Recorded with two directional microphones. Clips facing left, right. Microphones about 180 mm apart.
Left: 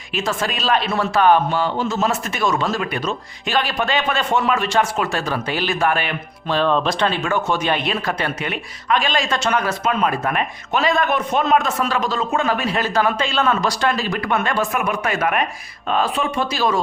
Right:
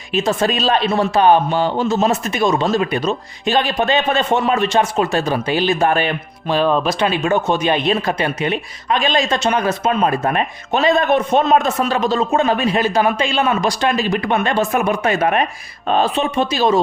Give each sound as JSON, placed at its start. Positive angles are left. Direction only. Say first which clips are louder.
{"t": 0.1, "sound": "speech", "louder": "right 6 dB", "side_deg": -20}
{"t": 5.9, "sound": "speech", "louder": "right 4 dB", "side_deg": -30}
{"t": 6.5, "sound": "speech", "louder": "right 2 dB", "side_deg": -10}